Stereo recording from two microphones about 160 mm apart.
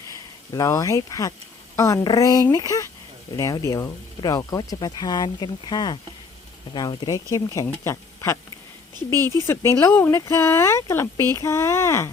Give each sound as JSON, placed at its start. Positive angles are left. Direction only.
{"t": 0.1, "sound": "speech", "side_deg": 20}